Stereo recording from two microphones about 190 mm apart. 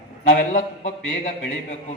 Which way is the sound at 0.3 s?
45° left (ahead or behind).